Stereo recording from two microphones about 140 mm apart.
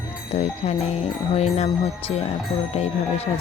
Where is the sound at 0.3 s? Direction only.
50° left (ahead or behind).